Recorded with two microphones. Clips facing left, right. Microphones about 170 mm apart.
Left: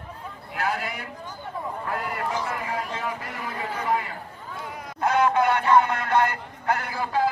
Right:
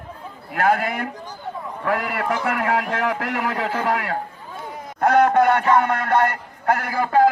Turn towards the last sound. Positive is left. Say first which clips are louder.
# right 8 dB
turn(degrees=-55)  # may be behind; listen again after turning